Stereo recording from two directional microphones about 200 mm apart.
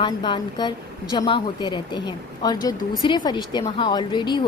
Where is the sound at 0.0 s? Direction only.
20° left (ahead or behind).